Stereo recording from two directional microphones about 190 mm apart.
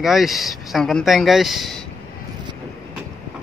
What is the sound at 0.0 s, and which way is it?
Speech, centre (ahead or behind).